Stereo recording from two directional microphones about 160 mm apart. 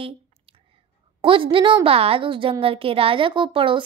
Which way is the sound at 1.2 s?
35° right (ahead or behind).